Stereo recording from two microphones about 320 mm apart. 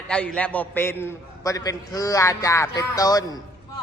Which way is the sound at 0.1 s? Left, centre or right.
Centre.